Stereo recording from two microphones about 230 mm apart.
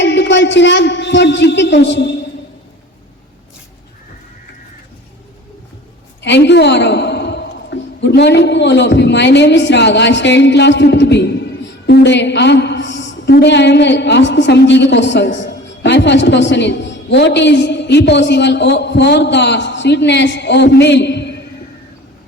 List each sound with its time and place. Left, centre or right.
0.0 s a man's voice: left
6.2 s a woman's voice: left